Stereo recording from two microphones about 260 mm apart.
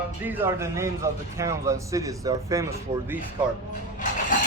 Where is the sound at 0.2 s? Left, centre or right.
Centre.